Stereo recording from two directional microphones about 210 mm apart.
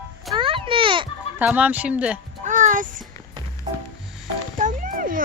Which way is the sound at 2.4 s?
35° right (ahead or behind).